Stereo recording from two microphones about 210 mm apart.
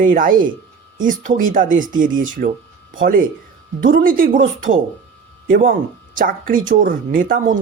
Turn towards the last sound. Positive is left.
turn(degrees=-40)  # may be behind; listen again after turning